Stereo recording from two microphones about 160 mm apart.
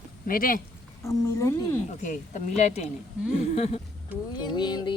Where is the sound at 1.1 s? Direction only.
20° left (ahead or behind).